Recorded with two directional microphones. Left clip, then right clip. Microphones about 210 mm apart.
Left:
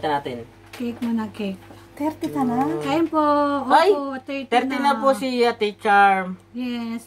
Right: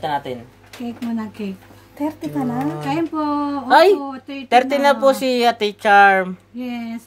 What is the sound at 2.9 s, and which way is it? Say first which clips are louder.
Speech: left 3 dB; 10° left (ahead or behind).